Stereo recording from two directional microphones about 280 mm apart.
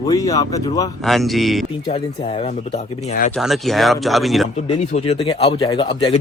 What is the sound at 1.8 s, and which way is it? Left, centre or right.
Speech, centre.